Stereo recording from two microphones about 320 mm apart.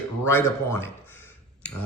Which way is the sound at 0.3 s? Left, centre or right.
Centre.